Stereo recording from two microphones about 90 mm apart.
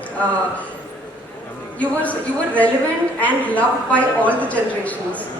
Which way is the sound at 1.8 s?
15° left (ahead or behind).